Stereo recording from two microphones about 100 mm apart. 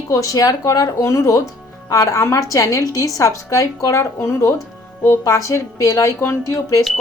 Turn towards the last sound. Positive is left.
turn(degrees=30)  # may be behind; listen again after turning